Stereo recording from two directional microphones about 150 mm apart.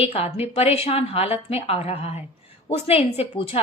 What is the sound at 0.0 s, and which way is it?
A woman's voice, 40° left (ahead or behind).